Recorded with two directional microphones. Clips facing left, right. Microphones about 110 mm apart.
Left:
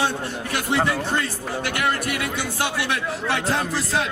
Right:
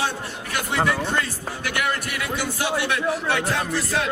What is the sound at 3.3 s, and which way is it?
Speech, 30° left (ahead or behind).